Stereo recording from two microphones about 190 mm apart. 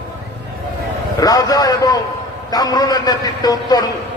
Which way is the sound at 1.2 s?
20° left (ahead or behind).